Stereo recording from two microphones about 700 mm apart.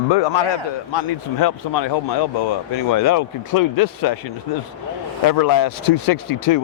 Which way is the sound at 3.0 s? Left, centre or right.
Left.